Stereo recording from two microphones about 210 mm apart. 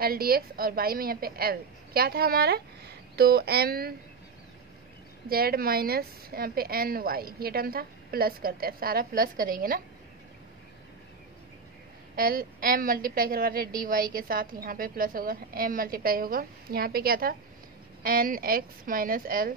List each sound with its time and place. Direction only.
0.0 s a woman's voice: 45° right (ahead or behind)
5.3 s a woman's voice: 45° right (ahead or behind)
12.2 s a woman's voice: 45° right (ahead or behind)